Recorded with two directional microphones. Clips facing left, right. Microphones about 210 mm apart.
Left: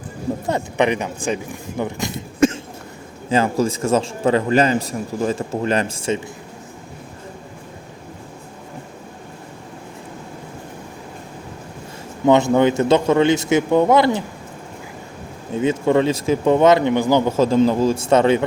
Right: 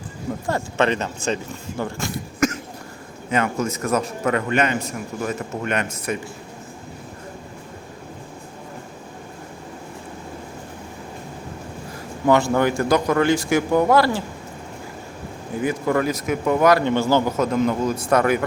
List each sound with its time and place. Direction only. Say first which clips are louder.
0.4 s a man's voice: left 2 dB; 20° left (ahead or behind)
12.2 s a man's voice: left 4 dB; 20° left (ahead or behind)
15.5 s a man's voice: left 4 dB; 25° left (ahead or behind)
17.3 s a man's voice: left 5 dB; 30° left (ahead or behind)